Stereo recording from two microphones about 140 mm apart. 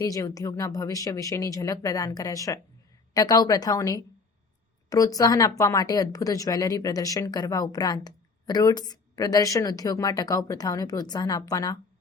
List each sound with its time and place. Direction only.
0.0 s speech: 25° left (ahead or behind)